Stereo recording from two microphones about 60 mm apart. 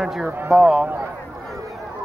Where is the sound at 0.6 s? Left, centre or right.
Centre.